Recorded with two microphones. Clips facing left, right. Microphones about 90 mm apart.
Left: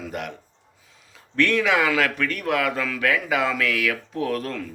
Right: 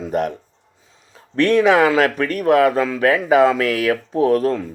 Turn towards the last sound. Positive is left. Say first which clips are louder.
# right 10 dB
turn(degrees=-25)  # may be behind; listen again after turning